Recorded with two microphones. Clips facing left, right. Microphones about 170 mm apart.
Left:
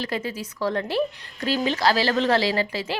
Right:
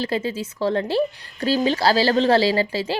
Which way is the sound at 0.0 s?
30° right (ahead or behind).